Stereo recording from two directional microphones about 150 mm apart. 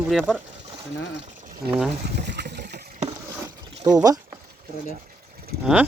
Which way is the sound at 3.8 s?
25° right (ahead or behind).